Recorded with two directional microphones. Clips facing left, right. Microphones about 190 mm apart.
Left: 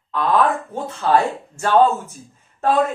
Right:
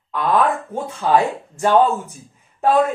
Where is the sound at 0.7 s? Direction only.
10° right (ahead or behind).